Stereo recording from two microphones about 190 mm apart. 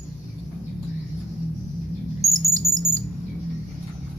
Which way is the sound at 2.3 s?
15° right (ahead or behind).